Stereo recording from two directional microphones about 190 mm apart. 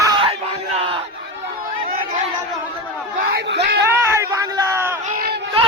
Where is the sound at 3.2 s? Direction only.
55° right (ahead or behind).